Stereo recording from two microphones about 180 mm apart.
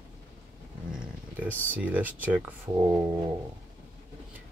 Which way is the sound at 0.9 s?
10° right (ahead or behind).